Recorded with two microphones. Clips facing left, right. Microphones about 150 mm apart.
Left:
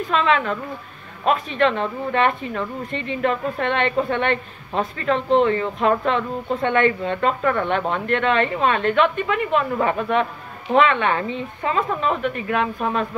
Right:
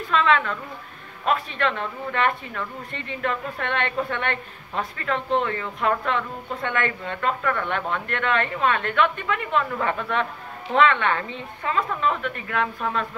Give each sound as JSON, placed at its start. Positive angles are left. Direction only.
{"t": 0.1, "sound": "a woman's voice", "side_deg": 20}